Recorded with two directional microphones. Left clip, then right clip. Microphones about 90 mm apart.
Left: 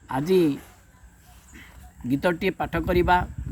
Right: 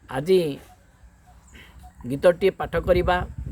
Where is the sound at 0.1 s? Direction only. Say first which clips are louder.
Right 1 dB; 35° right (ahead or behind).